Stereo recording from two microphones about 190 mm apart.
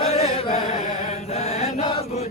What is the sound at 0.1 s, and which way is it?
Chant, 30° left (ahead or behind).